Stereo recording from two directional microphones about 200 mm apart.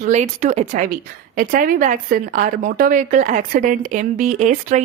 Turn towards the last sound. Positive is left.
turn(degrees=-40)  # may be behind; listen again after turning